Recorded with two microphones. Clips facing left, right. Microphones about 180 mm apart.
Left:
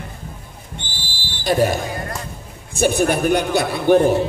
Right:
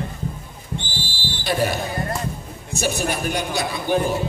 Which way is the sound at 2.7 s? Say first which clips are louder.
Left 7 dB; 55° left (ahead or behind).